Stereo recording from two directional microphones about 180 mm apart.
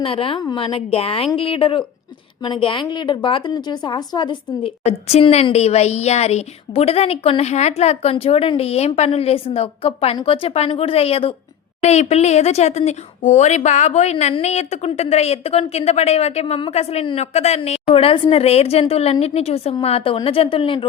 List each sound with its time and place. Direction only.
0.0 s a woman's voice: 30° left (ahead or behind)